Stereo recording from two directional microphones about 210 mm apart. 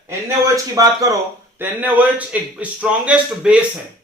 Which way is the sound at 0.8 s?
15° right (ahead or behind).